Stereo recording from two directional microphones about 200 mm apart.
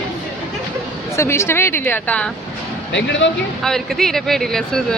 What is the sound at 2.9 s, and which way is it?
Speech, 60° left (ahead or behind).